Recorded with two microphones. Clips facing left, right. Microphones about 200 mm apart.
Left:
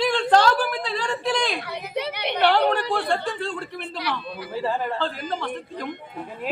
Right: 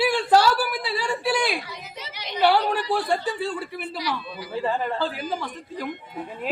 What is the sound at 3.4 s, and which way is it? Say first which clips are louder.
A man's voice: right 1 dB; 10° right (ahead or behind).